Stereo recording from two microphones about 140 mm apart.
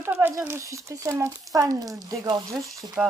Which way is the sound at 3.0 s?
5° right (ahead or behind).